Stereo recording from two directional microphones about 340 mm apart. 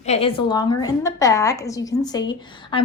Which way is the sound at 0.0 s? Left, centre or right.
Centre.